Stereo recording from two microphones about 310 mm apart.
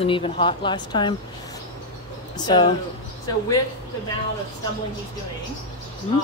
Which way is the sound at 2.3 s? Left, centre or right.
Centre.